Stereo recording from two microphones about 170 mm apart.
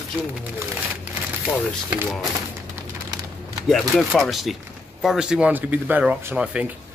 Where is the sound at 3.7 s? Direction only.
Centre (ahead or behind).